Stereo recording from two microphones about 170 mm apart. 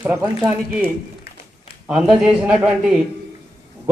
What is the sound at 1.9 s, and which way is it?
A man's voice, 5° right (ahead or behind).